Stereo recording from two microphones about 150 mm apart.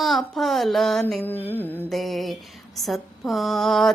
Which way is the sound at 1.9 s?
Centre (ahead or behind).